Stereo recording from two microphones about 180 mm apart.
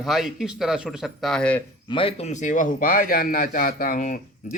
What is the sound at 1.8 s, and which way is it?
A man's voice, 30° left (ahead or behind).